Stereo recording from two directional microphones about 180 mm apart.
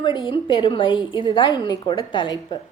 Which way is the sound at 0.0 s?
25° left (ahead or behind).